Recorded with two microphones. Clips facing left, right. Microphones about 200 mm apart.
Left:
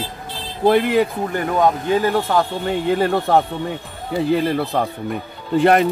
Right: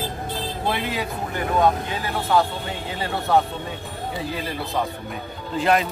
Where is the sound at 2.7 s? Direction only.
55° left (ahead or behind).